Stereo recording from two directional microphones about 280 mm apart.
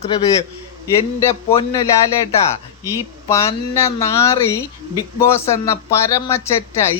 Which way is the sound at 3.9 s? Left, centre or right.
Centre.